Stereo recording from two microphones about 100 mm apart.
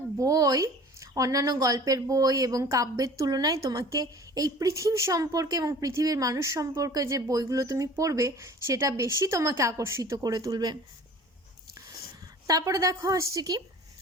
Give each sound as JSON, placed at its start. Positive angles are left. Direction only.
{"t": 0.2, "sound": "a woman's voice", "side_deg": -35}
{"t": 12.5, "sound": "a woman's voice", "side_deg": -35}